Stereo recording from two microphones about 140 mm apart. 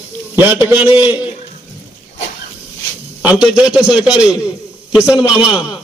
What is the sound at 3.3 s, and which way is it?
A man's voice, 5° right (ahead or behind).